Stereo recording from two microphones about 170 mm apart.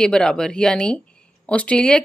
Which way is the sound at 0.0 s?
5° left (ahead or behind).